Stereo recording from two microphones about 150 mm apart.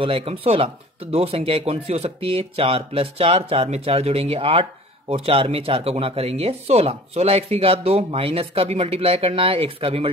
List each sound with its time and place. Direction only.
0.0 s speech: 35° right (ahead or behind)